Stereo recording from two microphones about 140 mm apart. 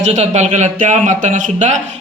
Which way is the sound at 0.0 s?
55° right (ahead or behind).